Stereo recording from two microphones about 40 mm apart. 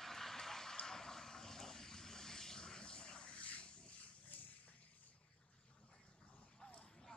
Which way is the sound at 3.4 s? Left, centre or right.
Left.